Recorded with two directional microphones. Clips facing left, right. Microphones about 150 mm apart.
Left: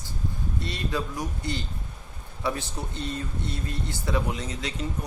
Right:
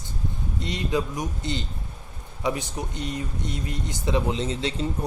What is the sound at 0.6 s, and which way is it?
Speech, 20° right (ahead or behind).